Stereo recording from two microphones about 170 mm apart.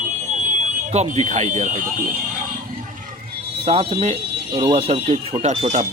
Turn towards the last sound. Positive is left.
turn(degrees=-40)  # may be behind; listen again after turning